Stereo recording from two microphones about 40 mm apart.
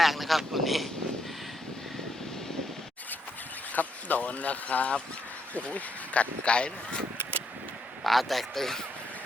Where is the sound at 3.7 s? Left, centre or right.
Left.